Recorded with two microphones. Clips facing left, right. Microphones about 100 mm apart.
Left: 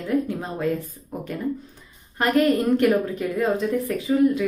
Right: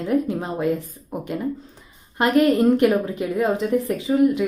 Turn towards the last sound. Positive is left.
turn(degrees=-20)  # may be behind; listen again after turning